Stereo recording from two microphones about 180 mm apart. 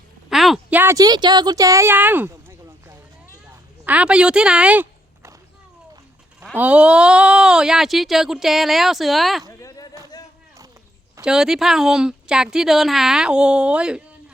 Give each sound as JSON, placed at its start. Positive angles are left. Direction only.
{"t": 0.3, "sound": "speech", "side_deg": 0}
{"t": 6.4, "sound": "speech", "side_deg": -10}
{"t": 9.5, "sound": "a sound", "side_deg": 15}
{"t": 11.2, "sound": "speech", "side_deg": -5}